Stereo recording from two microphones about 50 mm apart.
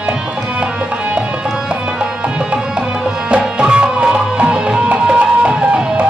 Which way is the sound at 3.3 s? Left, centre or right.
Centre.